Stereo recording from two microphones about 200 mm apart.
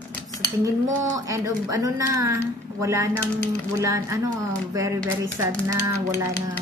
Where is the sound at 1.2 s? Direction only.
15° right (ahead or behind).